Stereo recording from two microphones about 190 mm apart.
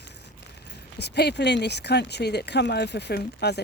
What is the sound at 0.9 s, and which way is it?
Speech, 60° left (ahead or behind).